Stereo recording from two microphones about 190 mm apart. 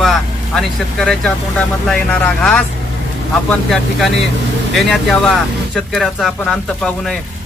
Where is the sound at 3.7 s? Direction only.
Centre (ahead or behind).